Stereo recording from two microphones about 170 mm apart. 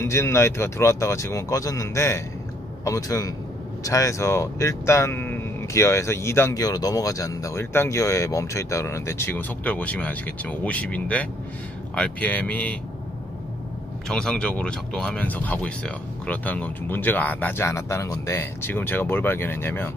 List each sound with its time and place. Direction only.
0.0 s a man's voice: 15° left (ahead or behind)
14.0 s speech: 5° left (ahead or behind)